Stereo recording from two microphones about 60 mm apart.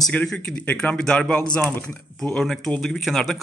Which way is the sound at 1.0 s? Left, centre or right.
Centre.